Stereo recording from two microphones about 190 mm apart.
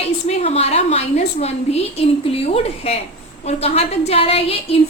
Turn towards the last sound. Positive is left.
turn(degrees=30)  # may be behind; listen again after turning